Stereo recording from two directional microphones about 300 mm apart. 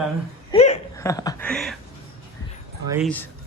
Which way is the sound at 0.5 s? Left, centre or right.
Left.